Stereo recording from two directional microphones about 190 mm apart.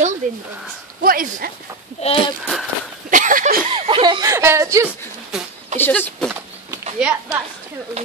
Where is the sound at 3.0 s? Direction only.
45° right (ahead or behind).